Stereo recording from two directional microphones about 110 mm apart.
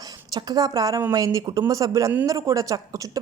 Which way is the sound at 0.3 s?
35° right (ahead or behind).